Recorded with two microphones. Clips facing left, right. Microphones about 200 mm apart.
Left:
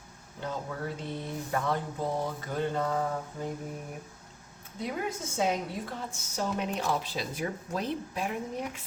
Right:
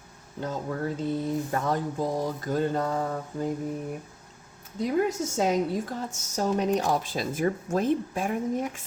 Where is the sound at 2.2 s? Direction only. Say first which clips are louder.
Right 5 dB; 40° right (ahead or behind).